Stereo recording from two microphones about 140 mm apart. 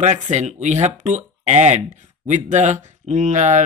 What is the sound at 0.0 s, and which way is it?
Speech, 55° right (ahead or behind).